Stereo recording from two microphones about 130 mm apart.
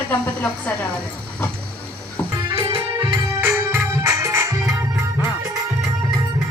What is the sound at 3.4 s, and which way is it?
Music, 15° right (ahead or behind).